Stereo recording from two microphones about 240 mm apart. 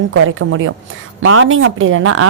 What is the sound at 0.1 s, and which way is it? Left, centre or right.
A woman's voice, right.